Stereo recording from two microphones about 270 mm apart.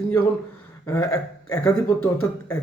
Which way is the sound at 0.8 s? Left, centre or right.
Centre.